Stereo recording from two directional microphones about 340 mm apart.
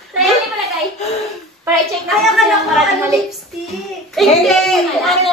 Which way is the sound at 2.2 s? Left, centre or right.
Centre.